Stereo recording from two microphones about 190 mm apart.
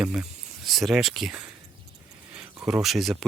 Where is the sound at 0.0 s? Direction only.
5° right (ahead or behind).